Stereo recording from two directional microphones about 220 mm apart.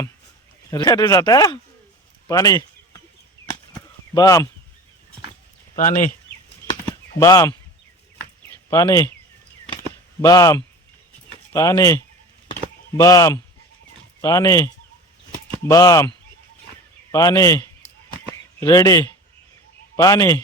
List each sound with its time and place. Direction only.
0.7 s speech: 15° left (ahead or behind)
2.2 s a sound: 15° left (ahead or behind)
4.1 s speech: 15° left (ahead or behind)
5.7 s speech: 35° left (ahead or behind)
7.2 s speech: 15° left (ahead or behind)
10.2 s speech: 15° left (ahead or behind)